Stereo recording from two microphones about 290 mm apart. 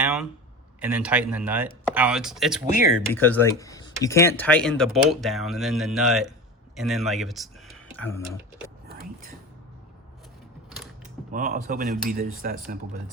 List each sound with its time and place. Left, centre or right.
0.0 s a sound: centre
0.8 s speech: centre
11.3 s speech: right